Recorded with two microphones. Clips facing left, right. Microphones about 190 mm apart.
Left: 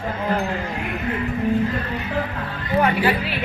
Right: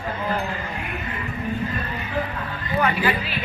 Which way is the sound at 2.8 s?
30° left (ahead or behind).